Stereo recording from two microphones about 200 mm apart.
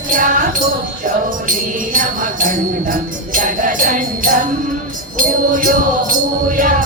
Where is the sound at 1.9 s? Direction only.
40° right (ahead or behind).